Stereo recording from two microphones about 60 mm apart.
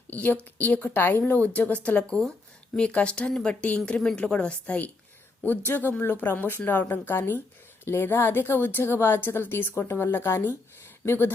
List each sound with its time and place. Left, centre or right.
0.1 s a woman's voice: left
5.4 s a woman's voice: left